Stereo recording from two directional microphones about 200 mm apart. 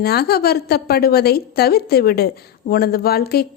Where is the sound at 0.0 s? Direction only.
50° left (ahead or behind).